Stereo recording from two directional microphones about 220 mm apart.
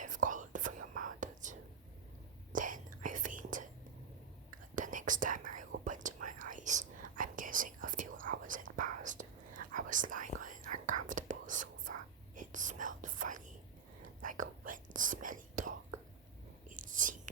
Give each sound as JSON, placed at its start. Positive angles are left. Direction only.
{"t": 0.0, "sound": "whispering", "side_deg": -35}
{"t": 4.7, "sound": "whispering", "side_deg": -35}